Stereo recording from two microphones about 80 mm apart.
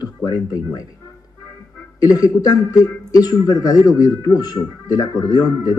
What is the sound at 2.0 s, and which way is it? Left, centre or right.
Speech, left.